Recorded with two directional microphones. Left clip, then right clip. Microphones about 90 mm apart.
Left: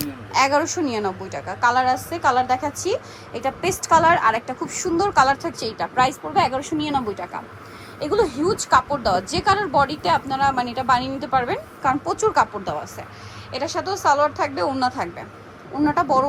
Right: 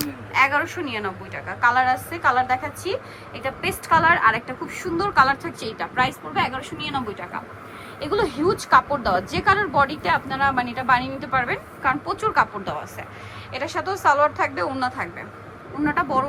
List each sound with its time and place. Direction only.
0.3 s a woman's voice: 50° left (ahead or behind)
6.3 s a woman's voice: 70° left (ahead or behind)
6.7 s speech: 90° left
8.0 s a woman's voice: 45° left (ahead or behind)